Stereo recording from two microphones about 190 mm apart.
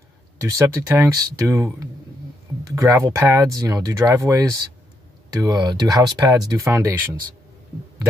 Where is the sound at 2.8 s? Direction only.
15° right (ahead or behind).